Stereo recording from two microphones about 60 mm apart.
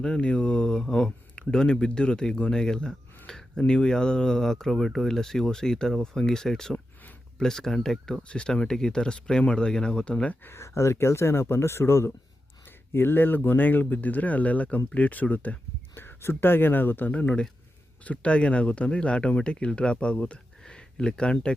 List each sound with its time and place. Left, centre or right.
0.0 s speech: centre
3.2 s a sound: centre
3.7 s speech: centre
8.3 s speech: centre
10.4 s speech: left
16.0 s speech: left
17.1 s speech: left